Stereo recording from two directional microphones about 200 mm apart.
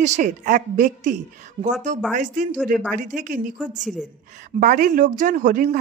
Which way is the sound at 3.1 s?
40° right (ahead or behind).